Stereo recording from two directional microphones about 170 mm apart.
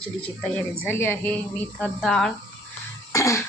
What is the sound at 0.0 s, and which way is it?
Speech, 10° left (ahead or behind).